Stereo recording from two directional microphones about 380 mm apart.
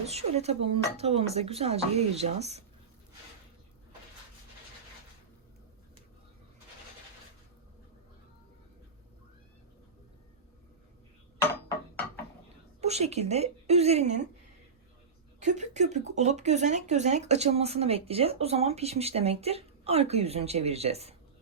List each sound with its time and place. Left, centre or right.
0.0 s speech: centre
12.8 s a woman's voice: centre
15.4 s speech: centre